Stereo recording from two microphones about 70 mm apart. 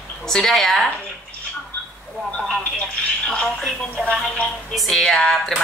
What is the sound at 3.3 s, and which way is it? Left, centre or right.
Music, centre.